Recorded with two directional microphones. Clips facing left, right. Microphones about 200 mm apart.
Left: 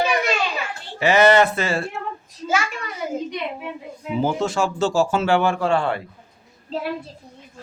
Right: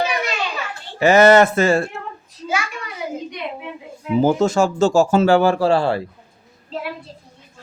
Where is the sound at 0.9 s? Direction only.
45° right (ahead or behind).